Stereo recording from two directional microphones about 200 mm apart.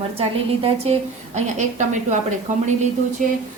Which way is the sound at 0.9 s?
35° right (ahead or behind).